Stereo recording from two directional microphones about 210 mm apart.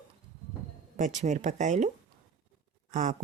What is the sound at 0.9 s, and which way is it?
Speech, 35° right (ahead or behind).